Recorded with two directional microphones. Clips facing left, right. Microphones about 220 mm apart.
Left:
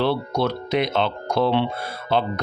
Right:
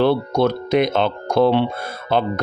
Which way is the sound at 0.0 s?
50° right (ahead or behind).